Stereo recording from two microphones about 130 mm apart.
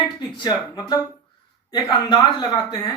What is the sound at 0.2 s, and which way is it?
Speech, 30° left (ahead or behind).